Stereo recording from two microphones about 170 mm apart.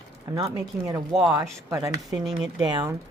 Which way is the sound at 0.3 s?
20° right (ahead or behind).